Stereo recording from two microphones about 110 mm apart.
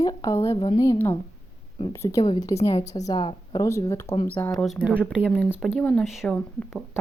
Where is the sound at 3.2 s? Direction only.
50° left (ahead or behind).